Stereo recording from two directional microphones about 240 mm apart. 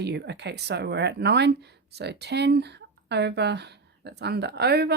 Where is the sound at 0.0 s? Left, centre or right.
Right.